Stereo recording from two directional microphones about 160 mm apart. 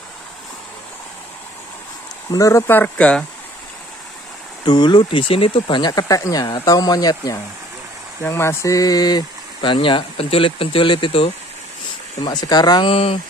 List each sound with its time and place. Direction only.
2.3 s speech: 20° left (ahead or behind)
4.6 s speech: 25° left (ahead or behind)